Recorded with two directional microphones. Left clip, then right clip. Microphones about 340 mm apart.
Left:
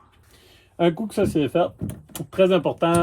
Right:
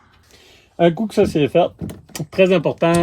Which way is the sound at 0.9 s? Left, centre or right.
Right.